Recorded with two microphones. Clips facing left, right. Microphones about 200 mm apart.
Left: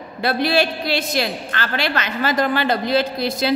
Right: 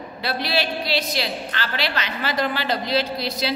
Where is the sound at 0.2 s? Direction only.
50° left (ahead or behind).